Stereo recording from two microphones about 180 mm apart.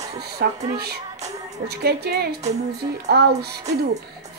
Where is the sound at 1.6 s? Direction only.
65° right (ahead or behind).